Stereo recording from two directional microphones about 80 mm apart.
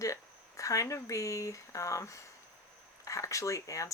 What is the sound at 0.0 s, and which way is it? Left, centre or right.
Speech, left.